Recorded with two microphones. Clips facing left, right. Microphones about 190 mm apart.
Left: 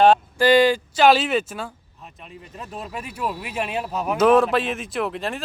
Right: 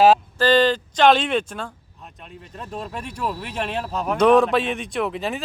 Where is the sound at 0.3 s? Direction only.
10° left (ahead or behind).